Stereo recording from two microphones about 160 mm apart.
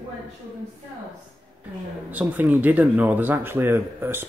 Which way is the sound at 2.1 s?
10° right (ahead or behind).